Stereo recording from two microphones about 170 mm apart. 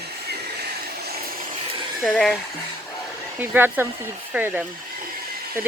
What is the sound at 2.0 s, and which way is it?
Speech, centre (ahead or behind).